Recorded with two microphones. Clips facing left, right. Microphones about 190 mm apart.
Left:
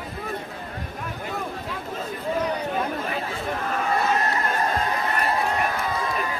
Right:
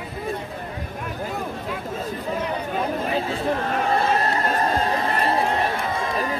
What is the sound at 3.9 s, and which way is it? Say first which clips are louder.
Crowd: right 1 dB; 30° right (ahead or behind).